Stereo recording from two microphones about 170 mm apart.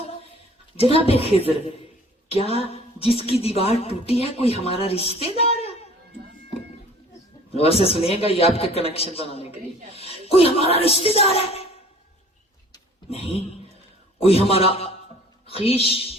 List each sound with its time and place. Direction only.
0.8 s a man's voice: 35° left (ahead or behind)
2.6 s a man's voice: 35° left (ahead or behind)
5.4 s a sound: 35° left (ahead or behind)
7.5 s a man's voice: 35° left (ahead or behind)
13.1 s a man's voice: 35° left (ahead or behind)